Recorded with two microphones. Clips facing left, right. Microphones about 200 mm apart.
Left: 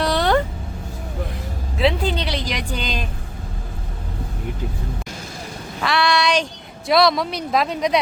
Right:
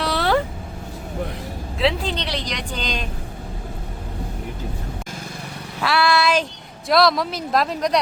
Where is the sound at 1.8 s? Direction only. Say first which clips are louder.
Left 2 dB; centre (ahead or behind).